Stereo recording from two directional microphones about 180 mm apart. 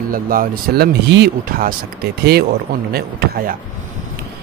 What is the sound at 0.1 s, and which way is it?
Speech, 50° right (ahead or behind).